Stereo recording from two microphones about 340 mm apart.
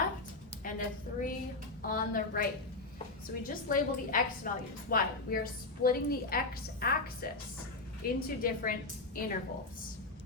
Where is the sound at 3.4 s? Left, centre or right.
Left.